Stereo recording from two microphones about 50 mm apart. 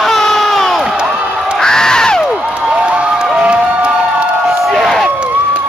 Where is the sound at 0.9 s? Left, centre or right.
Centre.